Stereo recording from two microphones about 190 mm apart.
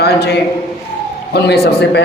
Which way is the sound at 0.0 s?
60° left (ahead or behind).